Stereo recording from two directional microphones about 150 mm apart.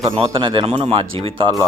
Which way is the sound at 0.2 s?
35° right (ahead or behind).